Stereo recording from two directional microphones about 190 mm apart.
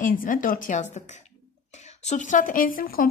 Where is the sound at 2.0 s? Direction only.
40° left (ahead or behind).